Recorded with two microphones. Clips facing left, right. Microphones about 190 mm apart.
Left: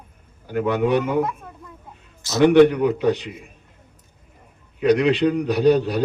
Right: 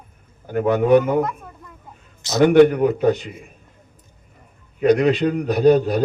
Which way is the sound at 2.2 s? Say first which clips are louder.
Right 2 dB; 20° right (ahead or behind).